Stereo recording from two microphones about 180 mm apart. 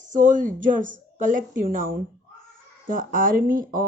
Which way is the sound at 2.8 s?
50° right (ahead or behind).